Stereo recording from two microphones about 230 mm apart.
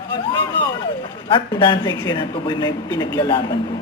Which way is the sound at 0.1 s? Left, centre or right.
Centre.